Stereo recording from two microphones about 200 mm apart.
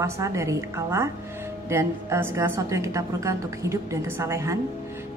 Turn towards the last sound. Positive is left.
turn(degrees=-15)  # may be behind; listen again after turning